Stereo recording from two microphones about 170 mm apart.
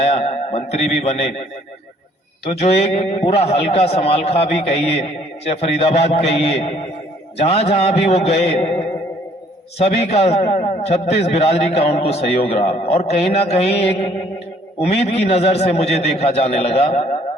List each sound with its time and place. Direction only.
0.0 s a man's voice: 40° left (ahead or behind)
2.5 s a man's voice: 40° left (ahead or behind)
7.3 s a man's voice: 35° left (ahead or behind)
9.7 s a man's voice: 40° left (ahead or behind)